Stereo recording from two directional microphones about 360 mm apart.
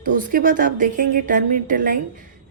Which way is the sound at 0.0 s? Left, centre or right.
Right.